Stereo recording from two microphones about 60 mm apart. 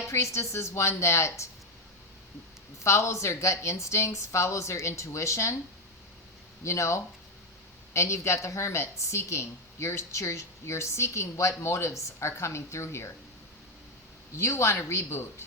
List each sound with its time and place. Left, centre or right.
0.1 s a woman's voice: left
2.8 s speech: left
6.7 s a woman's voice: left
14.3 s a woman's voice: left